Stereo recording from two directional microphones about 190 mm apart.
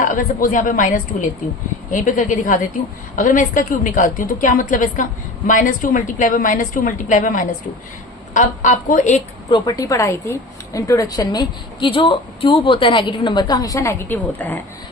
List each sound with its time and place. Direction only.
0.0 s a woman's voice: 45° left (ahead or behind)
9.5 s a woman's voice: 20° left (ahead or behind)